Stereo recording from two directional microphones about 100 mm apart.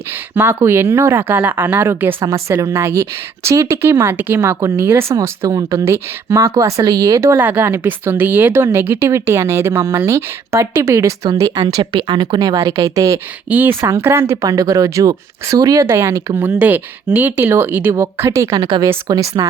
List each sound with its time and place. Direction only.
0.3 s speech: 25° right (ahead or behind)
2.2 s speech: 30° right (ahead or behind)
5.1 s speech: 35° right (ahead or behind)
11.5 s speech: 45° right (ahead or behind)
13.5 s speech: 20° right (ahead or behind)
14.4 s speech: 35° right (ahead or behind)